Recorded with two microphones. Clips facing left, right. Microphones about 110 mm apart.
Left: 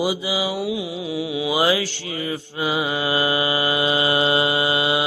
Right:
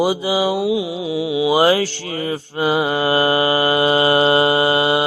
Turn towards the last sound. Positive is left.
turn(degrees=-45)  # may be behind; listen again after turning